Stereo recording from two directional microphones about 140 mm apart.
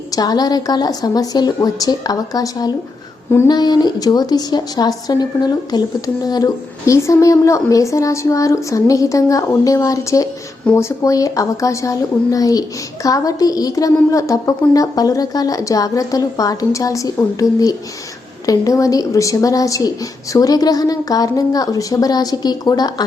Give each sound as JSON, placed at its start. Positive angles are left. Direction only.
{"t": 0.1, "sound": "speech", "side_deg": 30}